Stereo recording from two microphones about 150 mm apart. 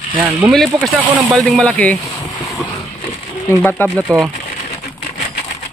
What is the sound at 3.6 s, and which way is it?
Speech, 10° left (ahead or behind).